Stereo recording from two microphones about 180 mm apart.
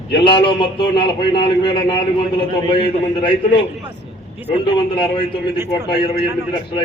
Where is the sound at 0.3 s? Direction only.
25° left (ahead or behind).